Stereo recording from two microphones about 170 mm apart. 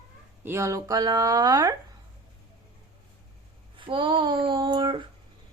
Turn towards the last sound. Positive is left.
turn(degrees=-25)  # may be behind; listen again after turning